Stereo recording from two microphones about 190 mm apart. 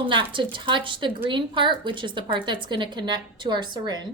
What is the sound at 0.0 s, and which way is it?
A woman's voice, 25° right (ahead or behind).